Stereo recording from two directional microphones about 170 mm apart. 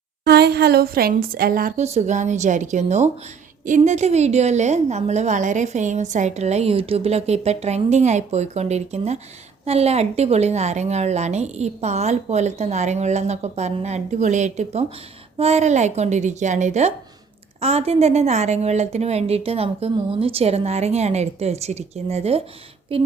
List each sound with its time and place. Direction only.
0.3 s a woman's voice: 70° right (ahead or behind); by 1.8 s 55° right (ahead or behind)
1.8 s a woman's voice: 40° right (ahead or behind)